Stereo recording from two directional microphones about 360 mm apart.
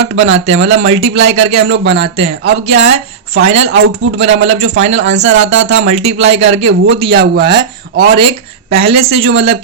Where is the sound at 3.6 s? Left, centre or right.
Right.